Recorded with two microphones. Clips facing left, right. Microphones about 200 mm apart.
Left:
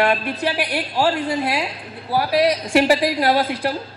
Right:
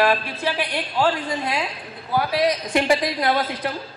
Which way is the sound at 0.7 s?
10° left (ahead or behind).